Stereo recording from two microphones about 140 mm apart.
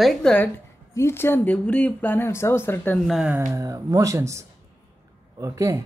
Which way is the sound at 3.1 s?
5° right (ahead or behind).